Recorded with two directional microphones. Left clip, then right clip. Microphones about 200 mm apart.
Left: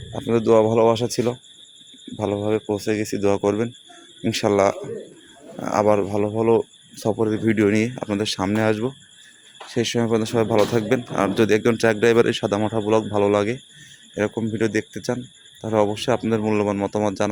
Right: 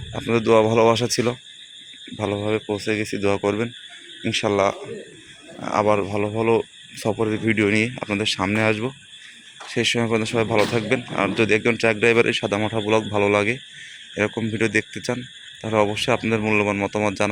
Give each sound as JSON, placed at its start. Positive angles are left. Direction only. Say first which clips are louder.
{"t": 0.1, "sound": "speech", "louder": "even", "side_deg": 15}